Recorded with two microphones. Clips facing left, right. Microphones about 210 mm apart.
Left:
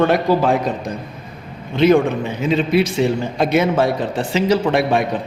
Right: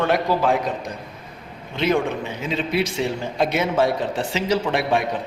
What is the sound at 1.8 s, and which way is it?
A man's voice, 50° left (ahead or behind).